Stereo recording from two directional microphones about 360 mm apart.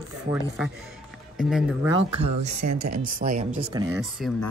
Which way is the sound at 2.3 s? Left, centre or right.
Centre.